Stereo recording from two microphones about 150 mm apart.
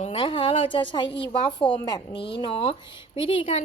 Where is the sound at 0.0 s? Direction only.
35° left (ahead or behind).